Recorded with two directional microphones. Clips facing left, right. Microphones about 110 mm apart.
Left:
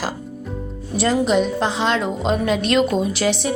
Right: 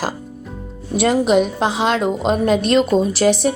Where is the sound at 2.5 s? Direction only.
40° right (ahead or behind).